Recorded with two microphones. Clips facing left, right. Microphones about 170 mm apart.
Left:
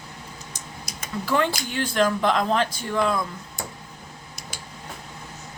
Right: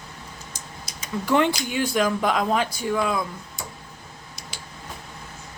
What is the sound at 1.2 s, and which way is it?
Speech, 20° right (ahead or behind).